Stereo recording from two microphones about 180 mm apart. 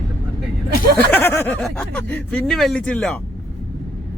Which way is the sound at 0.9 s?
10° left (ahead or behind).